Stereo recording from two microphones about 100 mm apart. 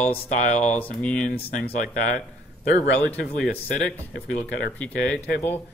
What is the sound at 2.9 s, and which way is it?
Speech, 10° left (ahead or behind).